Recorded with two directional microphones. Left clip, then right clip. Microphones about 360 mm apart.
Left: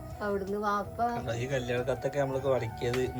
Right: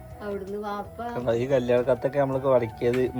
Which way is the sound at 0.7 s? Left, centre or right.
Centre.